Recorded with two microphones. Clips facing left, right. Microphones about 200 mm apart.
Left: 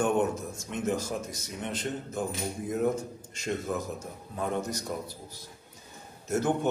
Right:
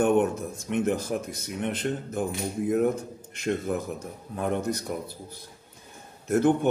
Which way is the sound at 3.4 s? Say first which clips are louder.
Right 4 dB; 60° right (ahead or behind).